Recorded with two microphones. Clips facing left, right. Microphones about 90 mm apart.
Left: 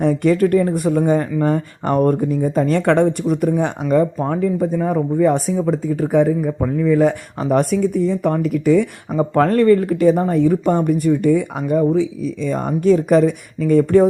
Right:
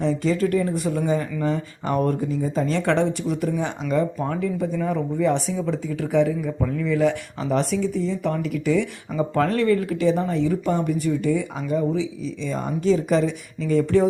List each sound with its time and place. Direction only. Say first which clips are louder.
0.0 s speech: left 6 dB; 55° left (ahead or behind)